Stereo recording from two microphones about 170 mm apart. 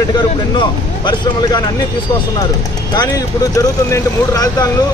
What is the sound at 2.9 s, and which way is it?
Speech, 20° left (ahead or behind).